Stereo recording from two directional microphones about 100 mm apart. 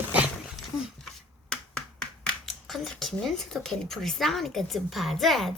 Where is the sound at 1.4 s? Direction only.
10° left (ahead or behind).